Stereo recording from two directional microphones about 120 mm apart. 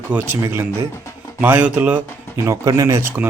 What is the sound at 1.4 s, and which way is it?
Speech, 15° right (ahead or behind).